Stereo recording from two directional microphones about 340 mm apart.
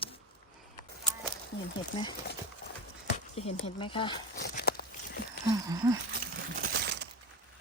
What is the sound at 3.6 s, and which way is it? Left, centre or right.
Speech, centre.